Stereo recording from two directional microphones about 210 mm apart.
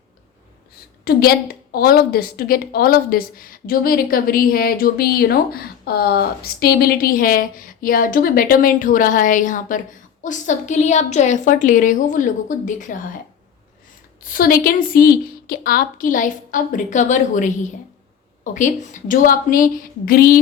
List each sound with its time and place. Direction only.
1.0 s a woman's voice: 50° left (ahead or behind)
14.2 s a woman's voice: 45° left (ahead or behind)